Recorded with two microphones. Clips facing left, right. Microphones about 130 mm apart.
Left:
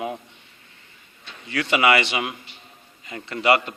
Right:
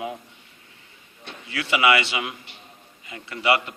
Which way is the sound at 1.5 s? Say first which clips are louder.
Left 1 dB; 45° left (ahead or behind).